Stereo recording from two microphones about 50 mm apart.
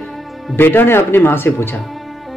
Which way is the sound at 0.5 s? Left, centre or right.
Left.